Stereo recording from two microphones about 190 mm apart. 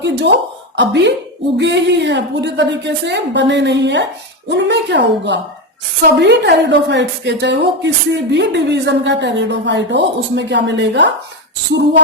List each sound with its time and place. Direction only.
0.0 s a woman's voice: 65° right (ahead or behind)